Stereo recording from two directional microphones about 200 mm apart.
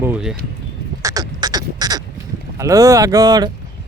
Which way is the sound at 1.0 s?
20° right (ahead or behind).